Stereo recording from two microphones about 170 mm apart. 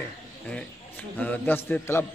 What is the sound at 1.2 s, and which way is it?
Speech, 10° left (ahead or behind).